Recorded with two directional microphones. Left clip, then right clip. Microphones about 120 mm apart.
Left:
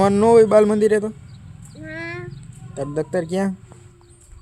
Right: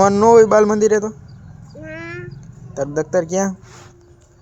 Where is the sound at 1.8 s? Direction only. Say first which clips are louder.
Even; 25° left (ahead or behind).